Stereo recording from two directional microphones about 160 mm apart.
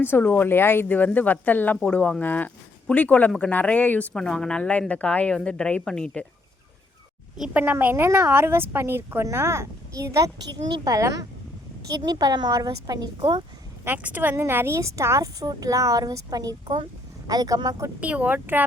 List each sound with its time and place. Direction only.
0.0 s speech: 10° left (ahead or behind)
7.3 s a woman's voice: 5° right (ahead or behind); by 13.4 s 25° right (ahead or behind)
13.8 s a woman's voice: 10° right (ahead or behind)
18.0 s a woman's voice: 10° right (ahead or behind)